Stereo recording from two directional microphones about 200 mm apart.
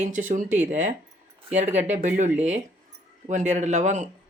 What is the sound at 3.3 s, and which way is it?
Speech, 35° right (ahead or behind).